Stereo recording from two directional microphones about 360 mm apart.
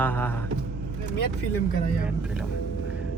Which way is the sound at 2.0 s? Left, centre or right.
Centre.